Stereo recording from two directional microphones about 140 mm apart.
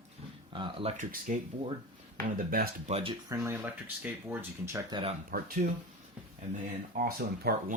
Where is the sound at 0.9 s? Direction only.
75° right (ahead or behind).